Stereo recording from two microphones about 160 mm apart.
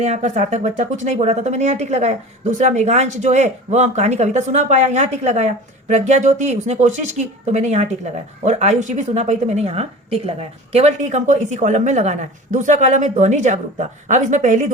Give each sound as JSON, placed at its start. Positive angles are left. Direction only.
{"t": 0.0, "sound": "speech", "side_deg": -45}